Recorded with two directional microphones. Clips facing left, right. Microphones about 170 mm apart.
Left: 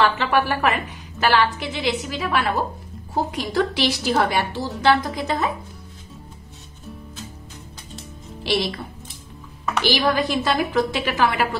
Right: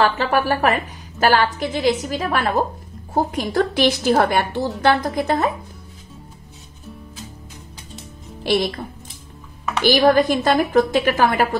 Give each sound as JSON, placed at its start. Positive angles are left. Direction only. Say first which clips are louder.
{"t": 0.0, "sound": "a woman's voice", "louder": "right 1 dB", "side_deg": -40}
{"t": 8.5, "sound": "a woman's voice", "louder": "right 4 dB", "side_deg": -50}
{"t": 9.8, "sound": "a woman's voice", "louder": "right 7 dB", "side_deg": -50}